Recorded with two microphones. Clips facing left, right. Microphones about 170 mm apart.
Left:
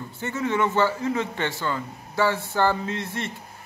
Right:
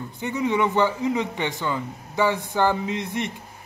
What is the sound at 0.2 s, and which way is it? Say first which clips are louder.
A man's voice: right 2 dB; 15° right (ahead or behind).